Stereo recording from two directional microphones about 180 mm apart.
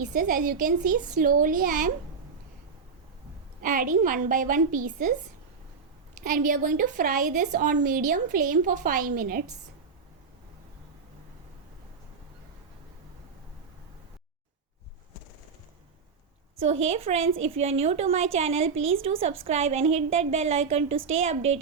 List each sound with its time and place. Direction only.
0.1 s a woman's voice: 50° right (ahead or behind)
3.6 s a woman's voice: 50° right (ahead or behind)
6.2 s a woman's voice: 50° right (ahead or behind)
16.6 s a woman's voice: 35° right (ahead or behind)